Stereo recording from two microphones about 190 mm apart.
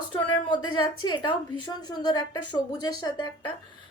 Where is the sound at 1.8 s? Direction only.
20° left (ahead or behind).